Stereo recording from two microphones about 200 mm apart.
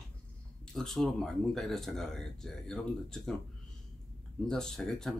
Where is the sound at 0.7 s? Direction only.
Centre (ahead or behind).